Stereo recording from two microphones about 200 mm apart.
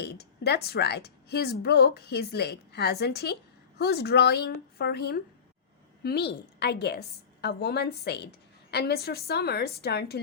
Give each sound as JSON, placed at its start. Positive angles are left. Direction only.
{"t": 0.0, "sound": "a woman's voice", "side_deg": 55}